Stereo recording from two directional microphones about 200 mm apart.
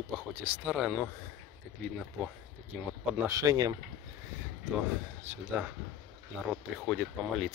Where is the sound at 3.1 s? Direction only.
15° right (ahead or behind).